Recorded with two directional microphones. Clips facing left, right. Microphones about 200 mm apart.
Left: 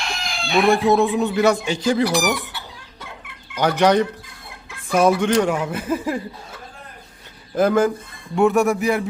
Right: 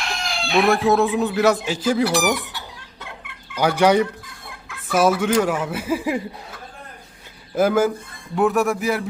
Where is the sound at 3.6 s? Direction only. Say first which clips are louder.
Even; 10° right (ahead or behind).